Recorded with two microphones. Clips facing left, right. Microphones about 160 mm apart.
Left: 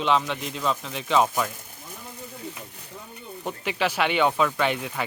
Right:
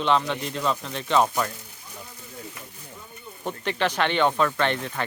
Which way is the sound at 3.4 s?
5° left (ahead or behind).